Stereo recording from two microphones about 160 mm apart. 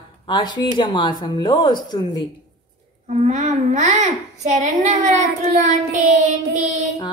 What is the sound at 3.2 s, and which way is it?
A child's voice, 45° right (ahead or behind).